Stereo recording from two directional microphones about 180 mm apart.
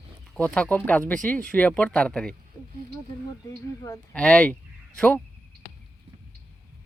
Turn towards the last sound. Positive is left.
turn(degrees=10)  # may be behind; listen again after turning